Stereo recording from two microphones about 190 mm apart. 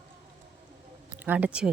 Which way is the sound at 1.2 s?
10° right (ahead or behind).